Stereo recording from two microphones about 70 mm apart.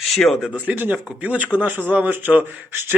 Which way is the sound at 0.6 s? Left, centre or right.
Right.